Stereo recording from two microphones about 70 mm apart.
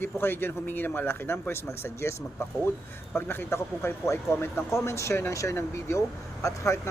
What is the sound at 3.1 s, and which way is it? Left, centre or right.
A man's voice, left.